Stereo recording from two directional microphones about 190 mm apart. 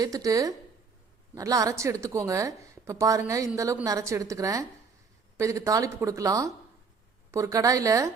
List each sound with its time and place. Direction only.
0.0 s a woman's voice: 20° right (ahead or behind)